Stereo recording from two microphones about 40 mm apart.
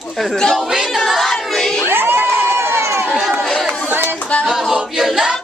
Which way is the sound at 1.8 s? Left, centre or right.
Right.